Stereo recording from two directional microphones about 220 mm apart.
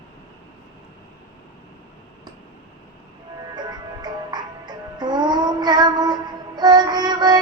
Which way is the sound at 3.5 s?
20° right (ahead or behind).